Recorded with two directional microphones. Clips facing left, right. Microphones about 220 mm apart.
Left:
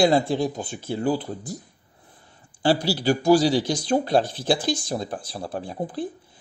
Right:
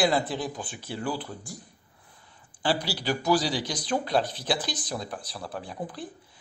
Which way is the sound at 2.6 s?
25° left (ahead or behind).